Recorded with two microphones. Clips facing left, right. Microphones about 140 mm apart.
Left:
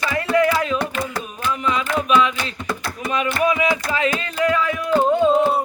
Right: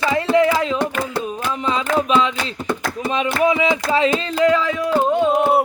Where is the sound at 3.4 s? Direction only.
25° right (ahead or behind).